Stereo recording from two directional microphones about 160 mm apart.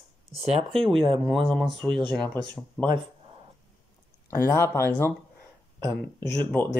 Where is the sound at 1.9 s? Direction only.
30° right (ahead or behind).